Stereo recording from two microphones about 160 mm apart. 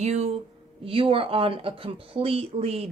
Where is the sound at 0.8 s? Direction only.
35° right (ahead or behind).